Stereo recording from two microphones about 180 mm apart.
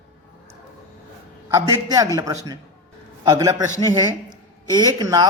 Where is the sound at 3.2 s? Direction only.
20° right (ahead or behind).